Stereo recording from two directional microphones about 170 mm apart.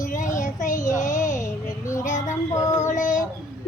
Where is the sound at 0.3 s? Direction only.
50° left (ahead or behind).